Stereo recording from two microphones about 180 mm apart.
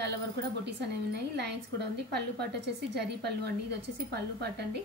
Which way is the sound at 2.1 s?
65° right (ahead or behind).